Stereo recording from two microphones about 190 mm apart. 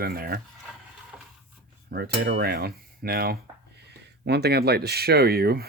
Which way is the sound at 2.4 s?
55° right (ahead or behind).